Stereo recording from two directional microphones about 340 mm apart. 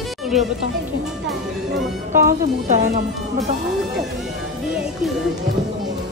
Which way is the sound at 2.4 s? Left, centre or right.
Right.